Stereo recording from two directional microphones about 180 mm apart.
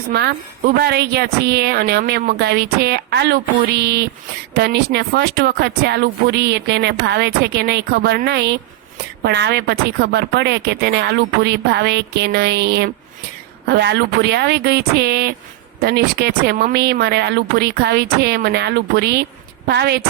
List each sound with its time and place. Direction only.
0.1 s speech: 65° right (ahead or behind)